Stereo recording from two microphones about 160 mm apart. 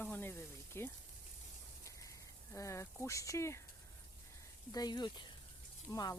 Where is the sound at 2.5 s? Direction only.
20° left (ahead or behind).